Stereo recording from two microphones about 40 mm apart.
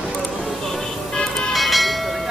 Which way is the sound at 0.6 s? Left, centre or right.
Centre.